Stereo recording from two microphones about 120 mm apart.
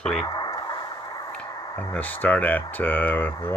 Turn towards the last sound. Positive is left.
turn(degrees=15)  # may be behind; listen again after turning